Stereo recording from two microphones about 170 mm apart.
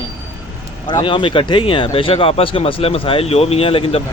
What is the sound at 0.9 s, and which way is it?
Speech, 30° left (ahead or behind).